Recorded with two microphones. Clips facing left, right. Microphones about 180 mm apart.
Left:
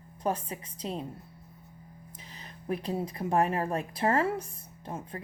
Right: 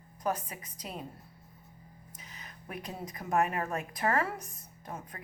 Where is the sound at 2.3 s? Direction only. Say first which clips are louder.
Left 9 dB; 30° left (ahead or behind).